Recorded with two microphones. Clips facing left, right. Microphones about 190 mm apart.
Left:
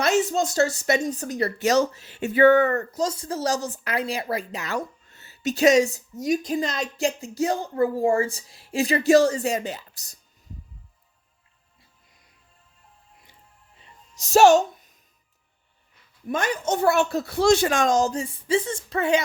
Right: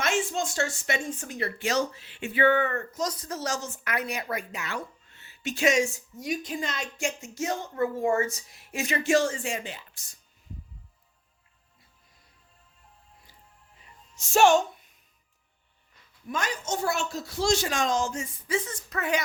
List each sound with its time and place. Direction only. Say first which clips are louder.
0.0 s speech: left 6 dB; 40° left (ahead or behind)
13.7 s music: left 3 dB; 40° left (ahead or behind)
16.3 s a woman's voice: left 6 dB; 55° left (ahead or behind); by 19.2 s 30° left (ahead or behind)